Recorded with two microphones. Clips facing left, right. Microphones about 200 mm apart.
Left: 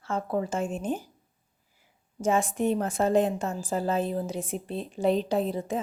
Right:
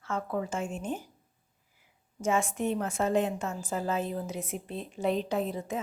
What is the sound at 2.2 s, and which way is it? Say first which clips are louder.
A woman's voice: left 3 dB; 35° left (ahead or behind).